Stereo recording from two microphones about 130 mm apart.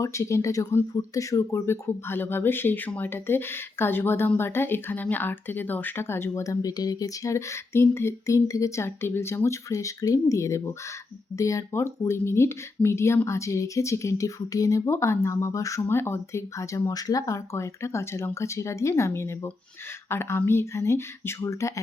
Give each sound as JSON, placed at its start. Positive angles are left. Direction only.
{"t": 0.0, "sound": "speech", "side_deg": 25}